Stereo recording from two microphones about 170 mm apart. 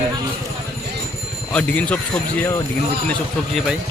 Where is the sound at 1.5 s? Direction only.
10° left (ahead or behind).